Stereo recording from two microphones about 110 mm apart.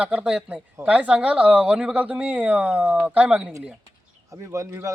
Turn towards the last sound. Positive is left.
turn(degrees=-30)  # may be behind; listen again after turning